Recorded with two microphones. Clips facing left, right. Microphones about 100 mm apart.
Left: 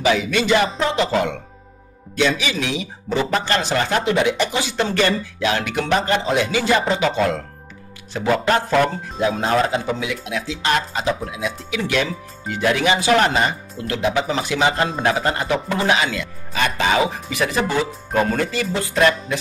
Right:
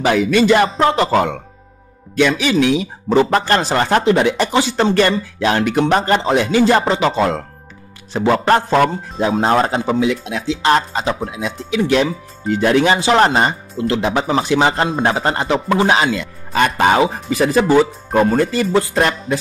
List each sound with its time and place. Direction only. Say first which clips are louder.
0.0 s speech: right 5 dB; 50° right (ahead or behind)
8.1 s speech: right 4 dB; 30° right (ahead or behind)
16.5 s speech: right 5 dB; 50° right (ahead or behind)